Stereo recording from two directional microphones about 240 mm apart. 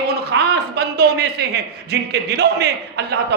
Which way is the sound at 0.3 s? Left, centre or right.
Right.